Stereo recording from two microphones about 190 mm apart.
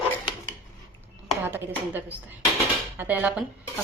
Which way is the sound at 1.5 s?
10° right (ahead or behind).